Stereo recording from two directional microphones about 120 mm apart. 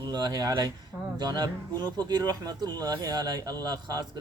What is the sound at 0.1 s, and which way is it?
Speech, 35° right (ahead or behind).